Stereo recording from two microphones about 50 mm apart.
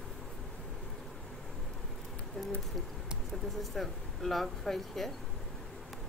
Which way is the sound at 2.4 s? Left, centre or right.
Centre.